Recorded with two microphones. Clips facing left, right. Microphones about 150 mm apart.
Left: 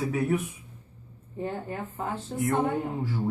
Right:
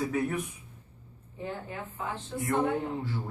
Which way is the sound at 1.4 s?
45° left (ahead or behind).